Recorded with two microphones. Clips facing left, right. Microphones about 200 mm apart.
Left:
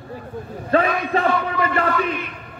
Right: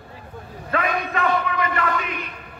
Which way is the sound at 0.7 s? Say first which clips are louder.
Left 5 dB; 30° left (ahead or behind).